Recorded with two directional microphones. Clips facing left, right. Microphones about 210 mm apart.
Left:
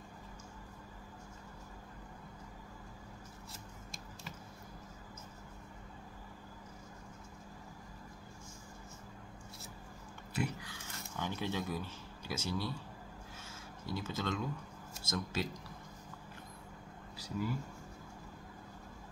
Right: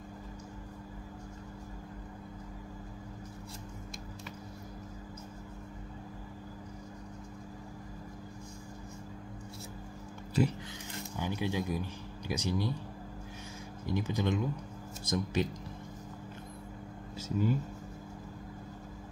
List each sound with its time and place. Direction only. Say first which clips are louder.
10.7 s speech: right 6 dB; 10° right (ahead or behind)
13.8 s speech: right 6 dB; 15° right (ahead or behind)
17.2 s speech: right 7 dB; 25° right (ahead or behind)